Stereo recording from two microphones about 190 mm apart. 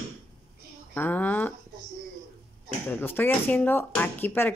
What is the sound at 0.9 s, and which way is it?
Speech, 10° left (ahead or behind).